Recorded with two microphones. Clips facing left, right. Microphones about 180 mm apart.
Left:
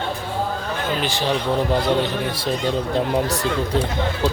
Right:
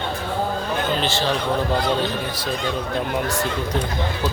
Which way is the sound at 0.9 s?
10° left (ahead or behind).